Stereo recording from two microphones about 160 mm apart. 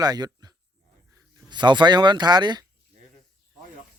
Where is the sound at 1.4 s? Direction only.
30° right (ahead or behind).